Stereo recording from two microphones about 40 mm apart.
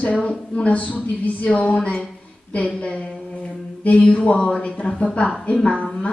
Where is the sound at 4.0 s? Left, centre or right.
Left.